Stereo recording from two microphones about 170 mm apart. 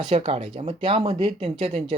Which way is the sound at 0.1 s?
40° right (ahead or behind).